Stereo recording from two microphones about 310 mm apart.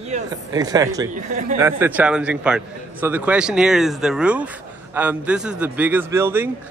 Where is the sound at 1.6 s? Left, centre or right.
Centre.